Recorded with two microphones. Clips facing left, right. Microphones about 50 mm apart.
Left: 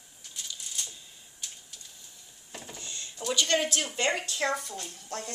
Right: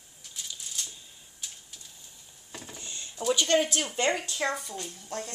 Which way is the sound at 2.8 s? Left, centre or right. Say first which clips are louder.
Even; right.